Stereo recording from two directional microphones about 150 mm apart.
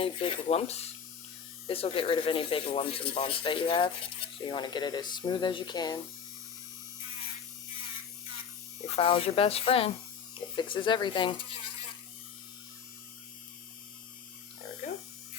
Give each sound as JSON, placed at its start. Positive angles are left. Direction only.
{"t": 0.0, "sound": "speech", "side_deg": 35}
{"t": 9.0, "sound": "speech", "side_deg": 40}